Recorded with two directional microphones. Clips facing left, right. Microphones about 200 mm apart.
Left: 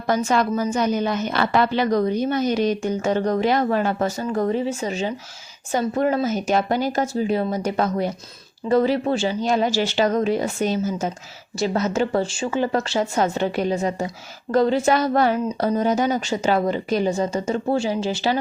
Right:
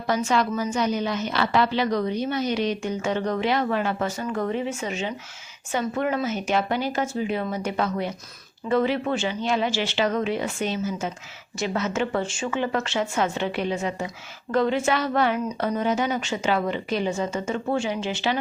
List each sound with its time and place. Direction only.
0.1 s a woman's voice: 45° left (ahead or behind)